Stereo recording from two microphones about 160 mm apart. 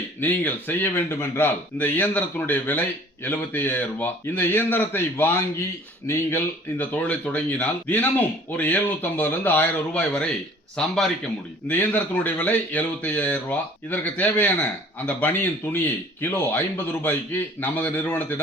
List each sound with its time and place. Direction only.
0.2 s speech: 10° left (ahead or behind)